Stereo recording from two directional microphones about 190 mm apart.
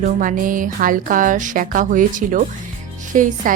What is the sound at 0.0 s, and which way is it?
Speech, 45° right (ahead or behind).